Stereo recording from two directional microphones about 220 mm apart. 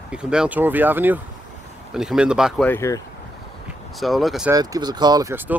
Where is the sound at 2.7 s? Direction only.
10° left (ahead or behind).